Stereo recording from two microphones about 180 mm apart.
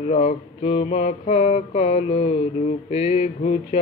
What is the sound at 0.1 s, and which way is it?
Mantra, 35° left (ahead or behind).